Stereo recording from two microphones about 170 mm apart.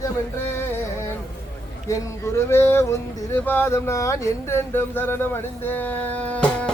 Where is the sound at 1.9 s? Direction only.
15° left (ahead or behind).